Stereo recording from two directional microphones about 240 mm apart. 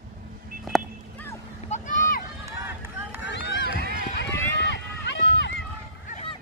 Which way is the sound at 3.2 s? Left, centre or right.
Left.